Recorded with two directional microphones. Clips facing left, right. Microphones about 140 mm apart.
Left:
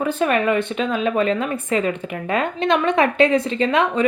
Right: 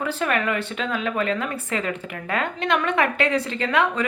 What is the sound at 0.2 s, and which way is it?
A woman's voice, 20° left (ahead or behind).